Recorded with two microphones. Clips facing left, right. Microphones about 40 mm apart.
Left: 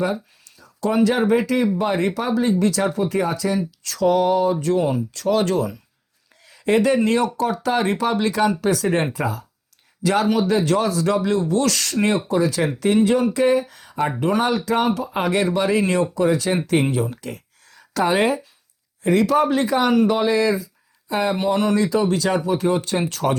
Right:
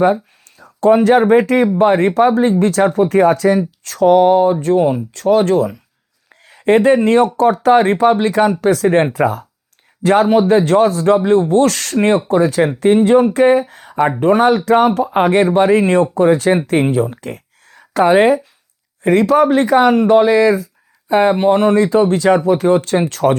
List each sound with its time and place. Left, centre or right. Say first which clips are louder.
0.6 s speech: right 8 dB; right